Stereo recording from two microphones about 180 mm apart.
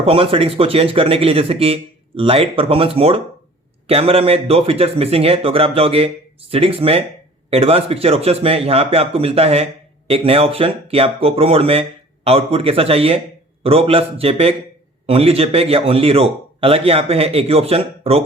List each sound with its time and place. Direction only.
0.0 s speech: 30° right (ahead or behind)